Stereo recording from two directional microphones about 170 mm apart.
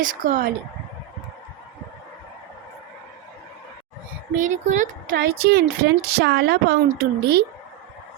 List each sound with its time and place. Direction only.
0.0 s speech: 50° right (ahead or behind)
4.4 s speech: 45° right (ahead or behind)
5.1 s a woman's voice: 65° right (ahead or behind)